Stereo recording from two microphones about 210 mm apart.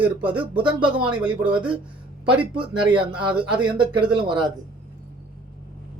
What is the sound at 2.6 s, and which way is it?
Speech, 25° right (ahead or behind).